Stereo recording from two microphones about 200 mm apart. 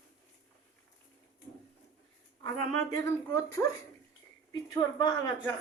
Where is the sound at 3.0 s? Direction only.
15° left (ahead or behind).